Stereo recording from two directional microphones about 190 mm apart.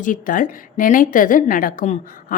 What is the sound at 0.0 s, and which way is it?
A woman's voice, 45° left (ahead or behind).